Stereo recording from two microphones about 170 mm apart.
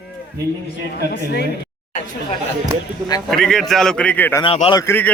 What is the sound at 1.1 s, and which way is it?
Speech, 80° left.